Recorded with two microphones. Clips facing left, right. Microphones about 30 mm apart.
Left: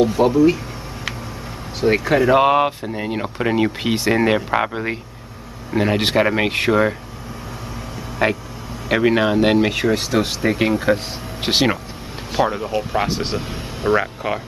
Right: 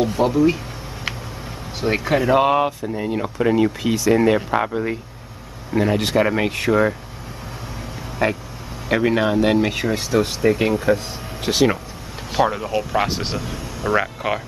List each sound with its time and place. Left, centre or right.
0.0 s speech: centre
1.8 s speech: centre
2.2 s speech: centre
2.6 s a man's voice: left
5.9 s speech: left
8.2 s speech: left
11.4 s speech: left
12.3 s speech: centre